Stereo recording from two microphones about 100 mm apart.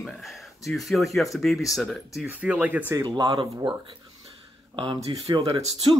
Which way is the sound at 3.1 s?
40° right (ahead or behind).